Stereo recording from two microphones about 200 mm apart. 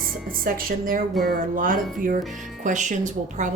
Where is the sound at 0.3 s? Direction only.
45° right (ahead or behind).